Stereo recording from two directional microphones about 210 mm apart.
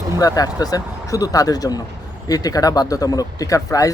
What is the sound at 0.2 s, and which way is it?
Speech, 15° left (ahead or behind).